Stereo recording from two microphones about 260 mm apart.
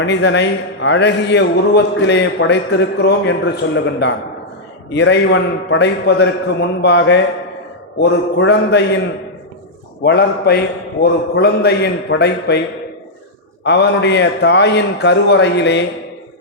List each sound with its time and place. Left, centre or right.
0.0 s a man's voice: left
10.0 s a man's voice: left
13.7 s a man's voice: left